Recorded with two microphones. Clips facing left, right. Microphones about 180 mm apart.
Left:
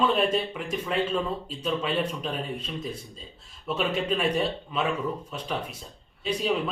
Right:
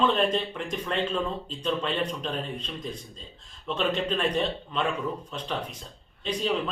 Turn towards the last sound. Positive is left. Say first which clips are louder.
# left 1 dB
turn(degrees=10)  # may be behind; listen again after turning